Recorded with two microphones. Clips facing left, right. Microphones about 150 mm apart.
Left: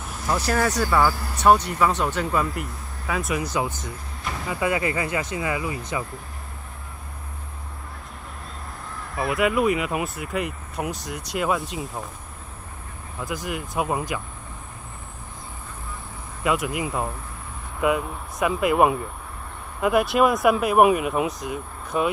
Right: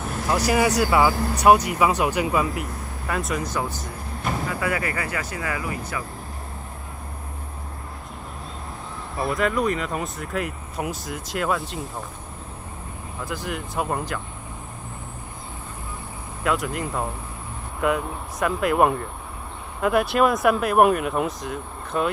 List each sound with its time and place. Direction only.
0.0 s vehicle: centre (ahead or behind)
1.2 s speech: centre (ahead or behind)
3.5 s speech: 20° left (ahead or behind)
9.1 s speech: centre (ahead or behind)
13.5 s speech: 5° left (ahead or behind)
16.4 s speech: 5° left (ahead or behind)